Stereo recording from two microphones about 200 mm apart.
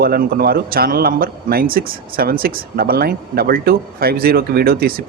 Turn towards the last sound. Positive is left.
turn(degrees=-50)  # may be behind; listen again after turning